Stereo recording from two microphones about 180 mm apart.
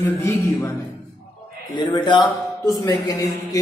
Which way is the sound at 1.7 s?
25° left (ahead or behind).